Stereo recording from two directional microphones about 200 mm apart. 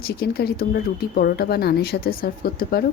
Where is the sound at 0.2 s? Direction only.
50° left (ahead or behind).